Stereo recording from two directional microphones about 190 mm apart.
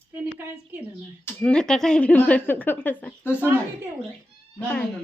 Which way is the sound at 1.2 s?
5° left (ahead or behind).